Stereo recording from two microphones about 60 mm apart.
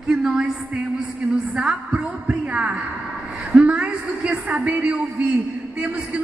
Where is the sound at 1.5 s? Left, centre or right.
Centre.